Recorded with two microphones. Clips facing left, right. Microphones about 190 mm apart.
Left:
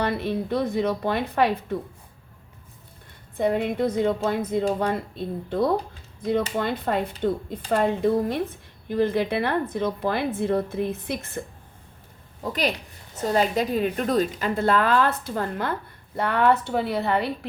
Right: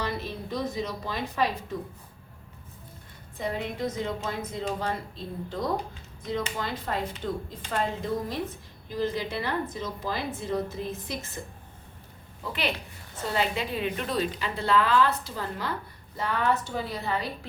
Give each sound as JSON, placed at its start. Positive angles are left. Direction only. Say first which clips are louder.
{"t": 0.0, "sound": "a woman's voice", "louder": "left 7 dB", "side_deg": 60}
{"t": 3.3, "sound": "a woman's voice", "louder": "left 9 dB", "side_deg": 60}
{"t": 12.4, "sound": "a woman's voice", "louder": "left 5 dB", "side_deg": 40}